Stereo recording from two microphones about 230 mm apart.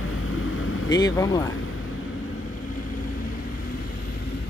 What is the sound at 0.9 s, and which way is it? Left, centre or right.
Speech, centre.